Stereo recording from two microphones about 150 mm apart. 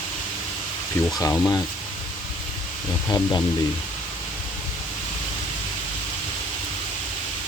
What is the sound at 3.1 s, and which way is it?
Speech, 25° left (ahead or behind).